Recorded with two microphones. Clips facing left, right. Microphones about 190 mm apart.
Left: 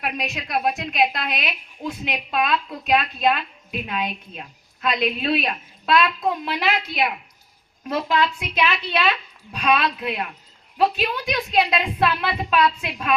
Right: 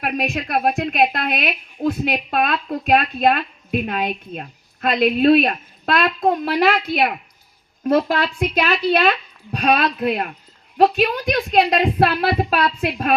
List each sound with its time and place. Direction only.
0.0 s a woman's voice: 50° right (ahead or behind)